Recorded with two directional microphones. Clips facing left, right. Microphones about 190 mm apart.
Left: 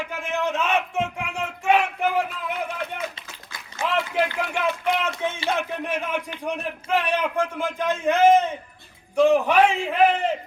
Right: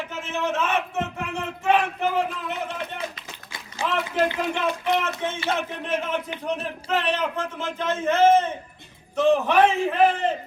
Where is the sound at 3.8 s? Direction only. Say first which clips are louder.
Left 1 dB; 30° right (ahead or behind).